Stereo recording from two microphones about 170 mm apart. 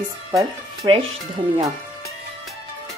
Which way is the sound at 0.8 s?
25° right (ahead or behind).